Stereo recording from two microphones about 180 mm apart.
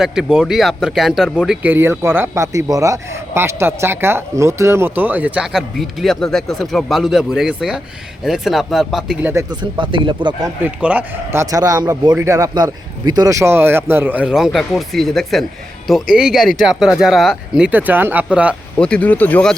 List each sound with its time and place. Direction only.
0.0 s speech: 5° right (ahead or behind)
9.3 s speech: 20° right (ahead or behind)
10.8 s a man's voice: 5° right (ahead or behind)
18.8 s speech: 5° left (ahead or behind)